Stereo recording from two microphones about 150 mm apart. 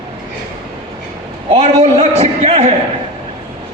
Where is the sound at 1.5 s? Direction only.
45° right (ahead or behind).